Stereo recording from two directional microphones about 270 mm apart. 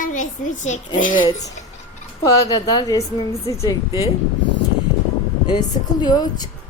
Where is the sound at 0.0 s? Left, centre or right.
Left.